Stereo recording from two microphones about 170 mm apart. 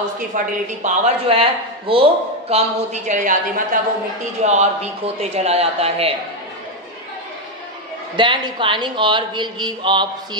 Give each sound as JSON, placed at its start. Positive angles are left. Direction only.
{"t": 0.3, "sound": "a man's voice", "side_deg": -50}
{"t": 2.5, "sound": "speech", "side_deg": -45}
{"t": 4.5, "sound": "a man's voice", "side_deg": -40}
{"t": 8.2, "sound": "speech", "side_deg": -30}